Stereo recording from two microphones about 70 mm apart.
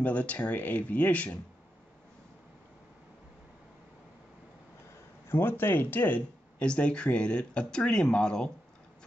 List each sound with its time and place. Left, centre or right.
0.0 s speech: left
5.3 s speech: left; by 8.5 s centre